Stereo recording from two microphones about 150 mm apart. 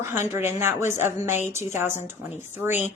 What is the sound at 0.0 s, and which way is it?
A woman's voice, 15° right (ahead or behind).